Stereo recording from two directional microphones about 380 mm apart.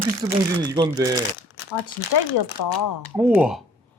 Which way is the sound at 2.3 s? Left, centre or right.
Left.